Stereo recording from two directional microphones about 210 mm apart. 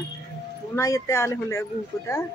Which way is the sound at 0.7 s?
15° left (ahead or behind).